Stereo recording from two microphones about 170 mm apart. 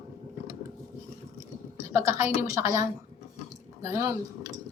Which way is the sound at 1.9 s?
15° right (ahead or behind).